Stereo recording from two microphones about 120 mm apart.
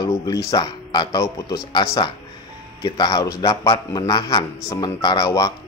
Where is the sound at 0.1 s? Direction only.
30° left (ahead or behind).